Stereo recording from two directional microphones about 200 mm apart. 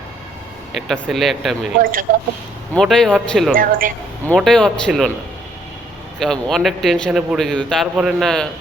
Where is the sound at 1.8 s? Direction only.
45° right (ahead or behind).